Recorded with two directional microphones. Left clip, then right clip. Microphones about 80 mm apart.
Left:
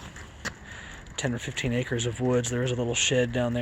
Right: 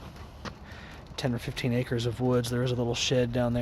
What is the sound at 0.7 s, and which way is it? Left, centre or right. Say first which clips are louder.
Speech: left 4 dB; right.